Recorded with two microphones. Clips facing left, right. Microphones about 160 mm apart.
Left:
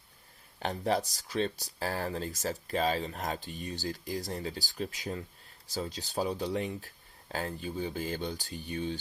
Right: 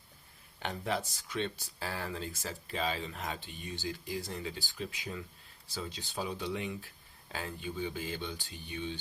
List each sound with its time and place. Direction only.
0.6 s speech: 35° left (ahead or behind)